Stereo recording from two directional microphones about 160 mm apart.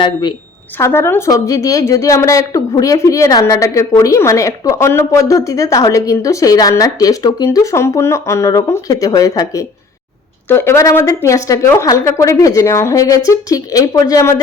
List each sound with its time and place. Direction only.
0.0 s a woman's voice: 30° left (ahead or behind)
0.8 s a woman's voice: 15° left (ahead or behind)